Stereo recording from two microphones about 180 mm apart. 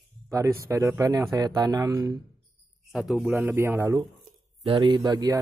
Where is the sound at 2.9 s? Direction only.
Centre (ahead or behind).